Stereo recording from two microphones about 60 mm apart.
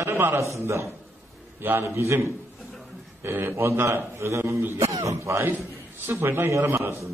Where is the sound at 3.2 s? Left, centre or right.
Right.